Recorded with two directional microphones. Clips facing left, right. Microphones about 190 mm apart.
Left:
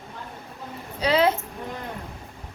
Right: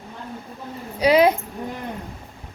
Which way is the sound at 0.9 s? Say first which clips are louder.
Right 5 dB; 15° right (ahead or behind).